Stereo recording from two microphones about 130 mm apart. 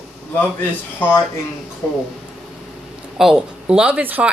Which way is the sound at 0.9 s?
20° left (ahead or behind).